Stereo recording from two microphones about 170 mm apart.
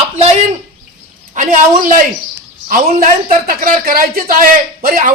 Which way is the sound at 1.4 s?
50° right (ahead or behind).